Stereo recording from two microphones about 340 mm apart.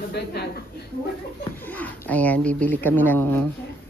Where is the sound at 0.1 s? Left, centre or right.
Left.